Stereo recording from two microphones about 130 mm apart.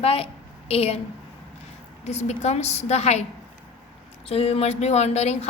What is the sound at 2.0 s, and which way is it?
A woman's voice, 55° left (ahead or behind).